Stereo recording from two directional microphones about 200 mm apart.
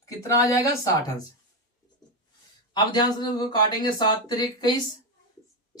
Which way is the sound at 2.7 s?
20° left (ahead or behind).